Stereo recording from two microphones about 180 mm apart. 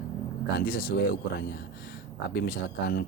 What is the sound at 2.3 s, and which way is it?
Speech, 65° left (ahead or behind).